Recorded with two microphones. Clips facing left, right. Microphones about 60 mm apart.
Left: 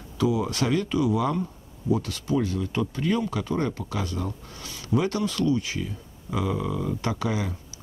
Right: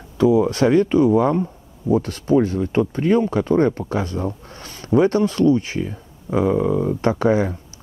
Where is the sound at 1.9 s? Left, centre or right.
Right.